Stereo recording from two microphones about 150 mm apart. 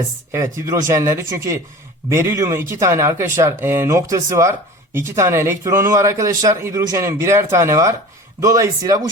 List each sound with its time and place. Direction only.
0.3 s speech: 20° right (ahead or behind)